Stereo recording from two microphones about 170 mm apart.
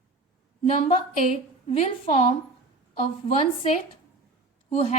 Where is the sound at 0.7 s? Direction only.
40° left (ahead or behind).